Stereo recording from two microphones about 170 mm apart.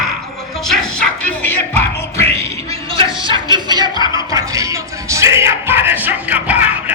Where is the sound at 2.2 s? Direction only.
20° left (ahead or behind).